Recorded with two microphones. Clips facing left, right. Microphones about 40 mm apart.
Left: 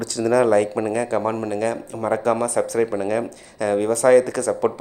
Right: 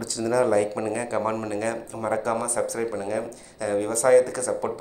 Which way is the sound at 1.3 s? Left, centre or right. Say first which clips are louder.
Left 3 dB; centre.